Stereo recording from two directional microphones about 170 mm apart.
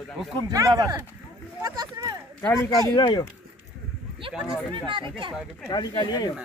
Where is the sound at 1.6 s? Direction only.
20° right (ahead or behind).